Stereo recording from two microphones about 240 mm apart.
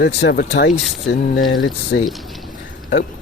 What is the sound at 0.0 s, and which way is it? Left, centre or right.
Speech, left.